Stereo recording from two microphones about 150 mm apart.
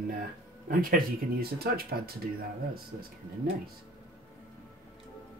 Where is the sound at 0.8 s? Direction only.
80° right.